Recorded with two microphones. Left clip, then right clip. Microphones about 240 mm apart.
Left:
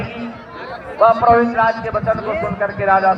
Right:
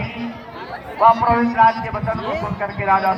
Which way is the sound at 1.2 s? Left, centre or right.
Right.